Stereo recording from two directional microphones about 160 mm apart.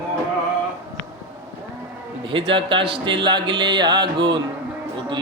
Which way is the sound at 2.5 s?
30° right (ahead or behind).